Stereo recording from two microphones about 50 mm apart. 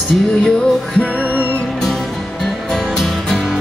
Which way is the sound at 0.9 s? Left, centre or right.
Left.